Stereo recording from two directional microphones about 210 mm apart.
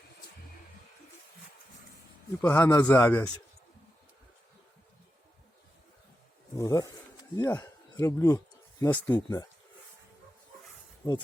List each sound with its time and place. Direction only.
2.4 s a man's voice: 10° left (ahead or behind)
6.6 s a man's voice: 15° left (ahead or behind)
11.0 s a man's voice: 10° left (ahead or behind)